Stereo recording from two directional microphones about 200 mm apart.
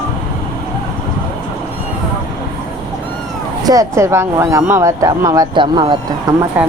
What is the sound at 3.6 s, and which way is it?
Speech, 15° right (ahead or behind).